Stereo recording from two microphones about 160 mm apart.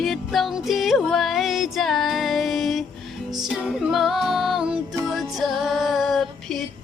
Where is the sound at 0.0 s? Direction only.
Centre (ahead or behind).